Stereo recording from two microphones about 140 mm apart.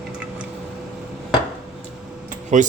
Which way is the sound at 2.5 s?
60° right (ahead or behind).